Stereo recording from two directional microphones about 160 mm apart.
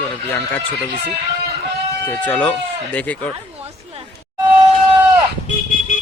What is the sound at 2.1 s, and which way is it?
Speech, 10° left (ahead or behind).